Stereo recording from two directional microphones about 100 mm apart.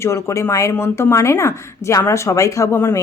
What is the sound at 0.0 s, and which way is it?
Speech, 30° left (ahead or behind).